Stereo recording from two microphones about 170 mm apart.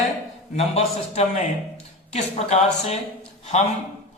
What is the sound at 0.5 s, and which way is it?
A man's voice, 40° left (ahead or behind).